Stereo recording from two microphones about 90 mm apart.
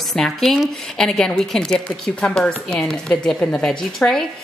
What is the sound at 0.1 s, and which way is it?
A woman's voice, 5° left (ahead or behind).